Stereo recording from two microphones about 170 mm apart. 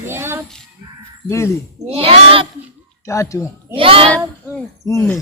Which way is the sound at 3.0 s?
15° left (ahead or behind).